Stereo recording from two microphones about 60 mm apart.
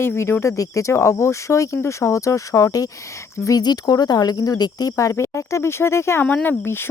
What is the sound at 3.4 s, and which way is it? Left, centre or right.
Speech, left.